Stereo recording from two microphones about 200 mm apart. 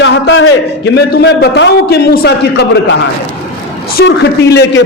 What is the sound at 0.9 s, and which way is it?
A man's voice, 55° left (ahead or behind).